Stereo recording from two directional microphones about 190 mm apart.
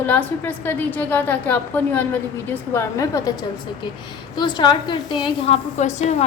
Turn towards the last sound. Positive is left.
turn(degrees=35)  # may be behind; listen again after turning